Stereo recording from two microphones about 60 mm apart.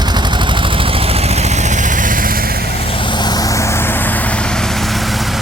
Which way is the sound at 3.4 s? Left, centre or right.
Left.